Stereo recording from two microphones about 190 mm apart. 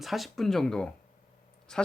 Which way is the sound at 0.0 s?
Centre (ahead or behind).